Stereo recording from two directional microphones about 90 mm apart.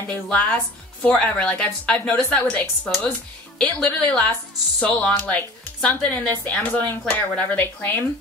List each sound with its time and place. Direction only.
0.1 s speech: 15° left (ahead or behind)